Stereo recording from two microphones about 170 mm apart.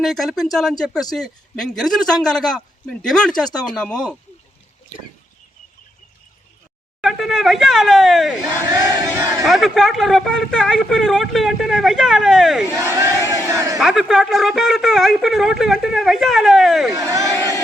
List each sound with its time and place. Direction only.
0.0 s speech: centre (ahead or behind)
7.0 s speech: centre (ahead or behind)
8.7 s speech: 15° right (ahead or behind)
9.5 s speech: centre (ahead or behind)
12.7 s crowd: 15° right (ahead or behind)
13.7 s speech: 5° right (ahead or behind)
16.9 s speech: 20° right (ahead or behind)